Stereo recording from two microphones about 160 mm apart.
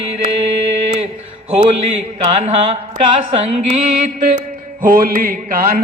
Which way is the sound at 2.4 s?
40° right (ahead or behind).